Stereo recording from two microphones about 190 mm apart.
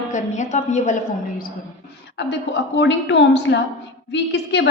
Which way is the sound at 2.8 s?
70° left (ahead or behind).